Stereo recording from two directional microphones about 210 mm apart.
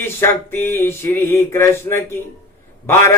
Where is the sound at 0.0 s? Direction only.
10° left (ahead or behind).